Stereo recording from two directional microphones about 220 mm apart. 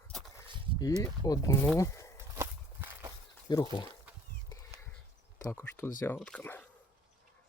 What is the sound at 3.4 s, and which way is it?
Speech, 20° left (ahead or behind).